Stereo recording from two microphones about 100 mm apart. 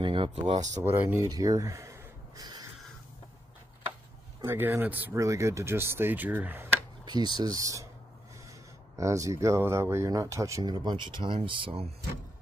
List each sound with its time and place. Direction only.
0.0 s a sound: 55° right (ahead or behind)
0.8 s speech: 25° right (ahead or behind)
1.3 s a sound: 35° right (ahead or behind)
4.5 s speech: 20° right (ahead or behind)
5.1 s speech: 30° right (ahead or behind)
7.1 s speech: 45° right (ahead or behind)
8.9 s speech: 30° right (ahead or behind)
10.6 s speech: 45° right (ahead or behind); by 11.9 s 75° right (ahead or behind)